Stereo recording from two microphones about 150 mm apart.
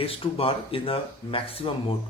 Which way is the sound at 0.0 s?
40° left (ahead or behind).